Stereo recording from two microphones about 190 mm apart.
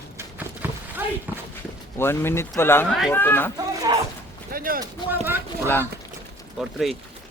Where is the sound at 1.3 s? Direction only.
10° right (ahead or behind).